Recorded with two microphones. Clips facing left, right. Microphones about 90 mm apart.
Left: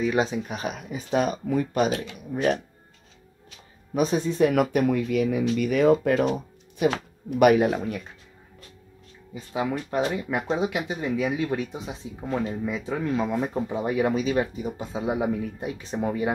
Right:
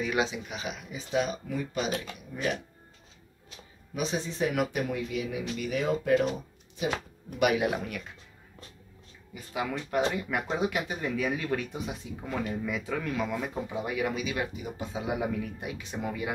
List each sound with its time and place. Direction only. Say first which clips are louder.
0.0 s speech: left 5 dB; 35° left (ahead or behind)
3.9 s speech: left 8 dB; 50° left (ahead or behind)
9.3 s speech: left 5 dB; 25° left (ahead or behind)